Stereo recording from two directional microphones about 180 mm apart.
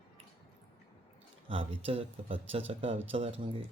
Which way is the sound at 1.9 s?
30° right (ahead or behind).